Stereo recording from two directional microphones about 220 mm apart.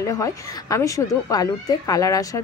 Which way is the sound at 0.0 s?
15° left (ahead or behind).